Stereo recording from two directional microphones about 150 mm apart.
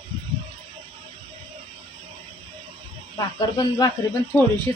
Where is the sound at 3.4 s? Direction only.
25° left (ahead or behind).